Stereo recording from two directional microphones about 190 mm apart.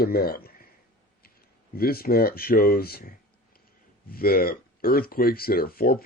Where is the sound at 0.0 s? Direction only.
55° left (ahead or behind).